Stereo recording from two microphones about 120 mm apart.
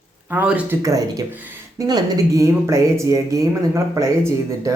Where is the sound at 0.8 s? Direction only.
30° right (ahead or behind).